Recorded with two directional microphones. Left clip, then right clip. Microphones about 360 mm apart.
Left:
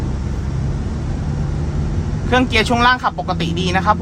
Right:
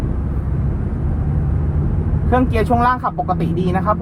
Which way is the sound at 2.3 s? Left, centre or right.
Left.